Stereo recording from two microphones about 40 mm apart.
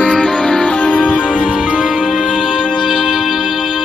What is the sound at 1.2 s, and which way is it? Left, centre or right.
Music, centre.